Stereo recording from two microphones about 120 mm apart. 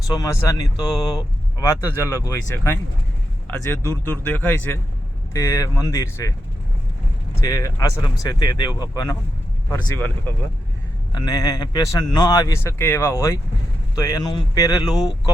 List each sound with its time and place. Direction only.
0.1 s a man's voice: 25° left (ahead or behind)
7.4 s a man's voice: 30° left (ahead or behind)
11.1 s a man's voice: 35° left (ahead or behind)